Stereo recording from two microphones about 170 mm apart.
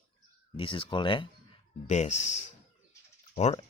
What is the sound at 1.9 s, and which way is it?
Speech, 45° left (ahead or behind).